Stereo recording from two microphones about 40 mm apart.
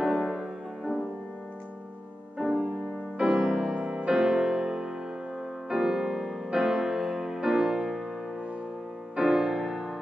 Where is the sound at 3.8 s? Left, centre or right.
Centre.